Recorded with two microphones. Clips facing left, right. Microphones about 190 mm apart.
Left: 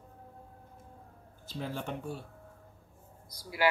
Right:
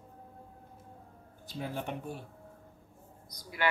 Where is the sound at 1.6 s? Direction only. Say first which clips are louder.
Even; 15° right (ahead or behind).